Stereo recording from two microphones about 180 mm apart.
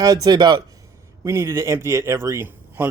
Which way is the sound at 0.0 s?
20° right (ahead or behind).